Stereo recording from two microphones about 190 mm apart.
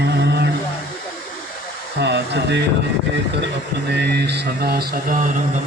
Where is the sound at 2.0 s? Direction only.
65° right (ahead or behind).